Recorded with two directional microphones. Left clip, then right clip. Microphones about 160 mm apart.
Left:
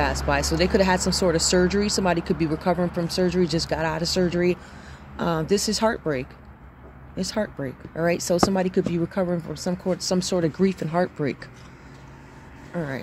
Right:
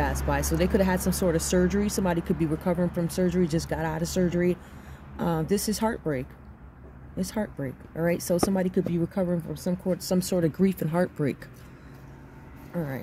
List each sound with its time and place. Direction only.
0.3 s speech: 25° right (ahead or behind); by 11.4 s 40° right (ahead or behind)
12.7 s speech: 20° right (ahead or behind)